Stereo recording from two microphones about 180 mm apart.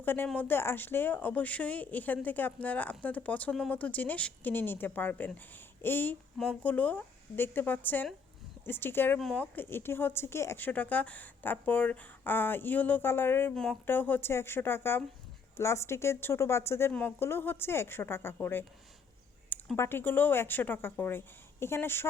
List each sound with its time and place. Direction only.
0.0 s speech: 10° left (ahead or behind)